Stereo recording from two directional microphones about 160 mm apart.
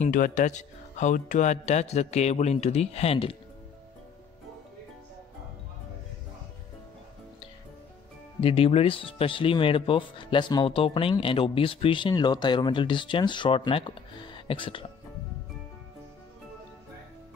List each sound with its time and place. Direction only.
0.0 s speech: 50° left (ahead or behind)
8.4 s speech: 35° left (ahead or behind)